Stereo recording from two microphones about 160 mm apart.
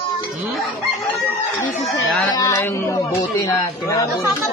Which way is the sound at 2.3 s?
20° left (ahead or behind).